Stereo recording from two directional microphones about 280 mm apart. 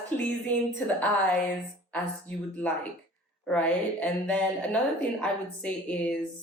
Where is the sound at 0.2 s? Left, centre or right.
Centre.